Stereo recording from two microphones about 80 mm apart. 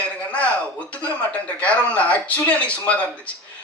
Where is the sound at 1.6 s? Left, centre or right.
Centre.